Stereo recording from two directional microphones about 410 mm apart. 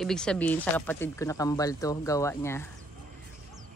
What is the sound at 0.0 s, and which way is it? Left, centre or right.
Speech, centre.